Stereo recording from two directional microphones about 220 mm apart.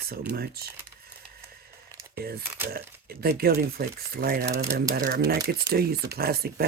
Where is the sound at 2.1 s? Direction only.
45° right (ahead or behind).